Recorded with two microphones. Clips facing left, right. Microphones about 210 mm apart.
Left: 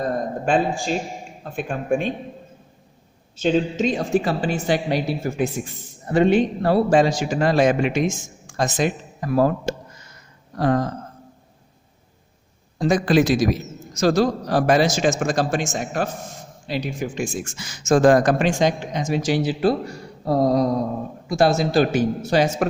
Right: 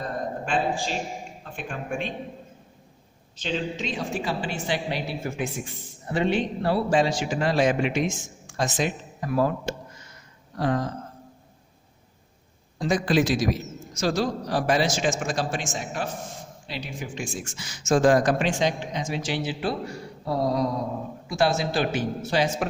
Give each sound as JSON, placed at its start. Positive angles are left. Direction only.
{"t": 0.0, "sound": "a sound", "side_deg": 40}
{"t": 1.6, "sound": "a man's voice", "side_deg": 45}
{"t": 3.3, "sound": "a man's voice", "side_deg": 45}
{"t": 12.8, "sound": "a man's voice", "side_deg": 50}